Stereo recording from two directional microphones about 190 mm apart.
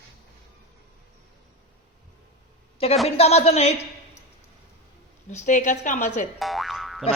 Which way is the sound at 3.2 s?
35° left (ahead or behind).